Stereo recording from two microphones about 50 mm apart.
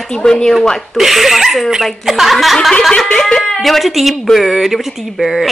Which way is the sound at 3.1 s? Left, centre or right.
Centre.